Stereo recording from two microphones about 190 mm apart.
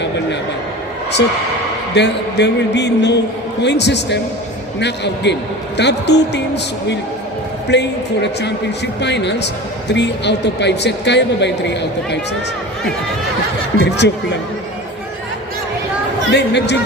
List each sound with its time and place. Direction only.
2.0 s speech: 65° left (ahead or behind)
7.7 s speech: 65° left (ahead or behind)
13.7 s speech: 65° left (ahead or behind)
16.3 s speech: 65° left (ahead or behind)